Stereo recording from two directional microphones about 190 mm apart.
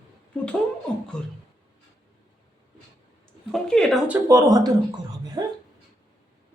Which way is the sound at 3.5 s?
5° left (ahead or behind).